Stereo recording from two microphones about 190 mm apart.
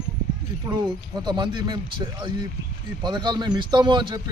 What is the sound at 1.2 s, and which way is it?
A man's voice, 25° right (ahead or behind).